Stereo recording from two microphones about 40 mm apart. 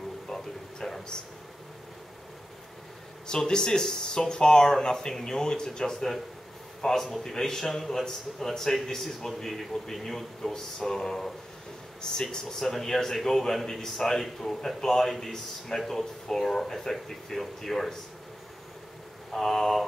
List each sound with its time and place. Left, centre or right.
0.3 s a sound: centre
3.3 s speech: centre
19.3 s speech: centre